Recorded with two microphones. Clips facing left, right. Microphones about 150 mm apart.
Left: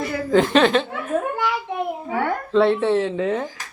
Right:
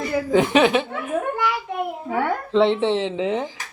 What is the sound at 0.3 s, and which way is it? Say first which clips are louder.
Speech: left 1 dB; 15° right (ahead or behind).